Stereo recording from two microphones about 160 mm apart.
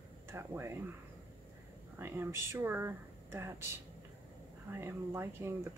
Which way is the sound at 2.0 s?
15° right (ahead or behind).